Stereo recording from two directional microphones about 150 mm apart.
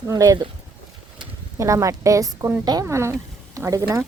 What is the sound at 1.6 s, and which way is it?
A woman's voice, 20° right (ahead or behind).